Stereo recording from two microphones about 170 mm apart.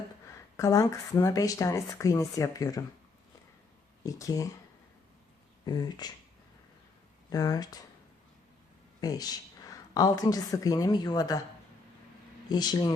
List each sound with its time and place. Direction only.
0.3 s speech: 20° left (ahead or behind)
4.0 s speech: 20° left (ahead or behind)
5.6 s speech: 25° left (ahead or behind)
7.3 s speech: 20° left (ahead or behind)
9.0 s speech: 20° left (ahead or behind)
12.5 s speech: 25° left (ahead or behind)